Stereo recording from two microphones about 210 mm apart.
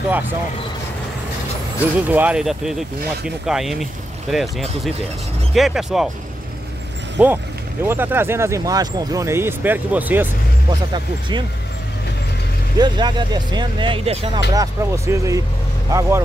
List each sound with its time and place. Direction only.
2.0 s speech: 5° right (ahead or behind)
7.2 s speech: 5° right (ahead or behind)
10.9 s speech: 20° right (ahead or behind)
12.7 s speech: 20° right (ahead or behind)